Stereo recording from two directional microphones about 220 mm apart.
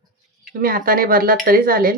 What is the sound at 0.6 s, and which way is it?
Speech, 40° right (ahead or behind).